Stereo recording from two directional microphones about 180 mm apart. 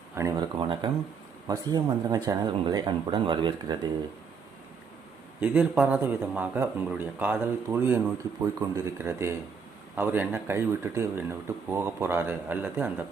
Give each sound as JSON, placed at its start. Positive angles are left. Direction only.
{"t": 0.1, "sound": "speech", "side_deg": -15}
{"t": 0.5, "sound": "speech", "side_deg": -25}
{"t": 5.4, "sound": "speech", "side_deg": -10}